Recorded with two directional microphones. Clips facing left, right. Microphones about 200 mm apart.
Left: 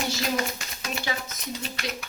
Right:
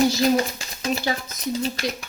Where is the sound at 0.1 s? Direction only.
35° right (ahead or behind).